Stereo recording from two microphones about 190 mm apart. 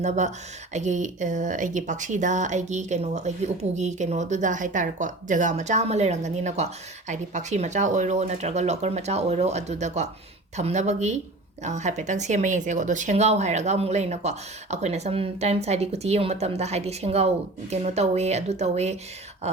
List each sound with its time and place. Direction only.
0.0 s speech: 40° right (ahead or behind)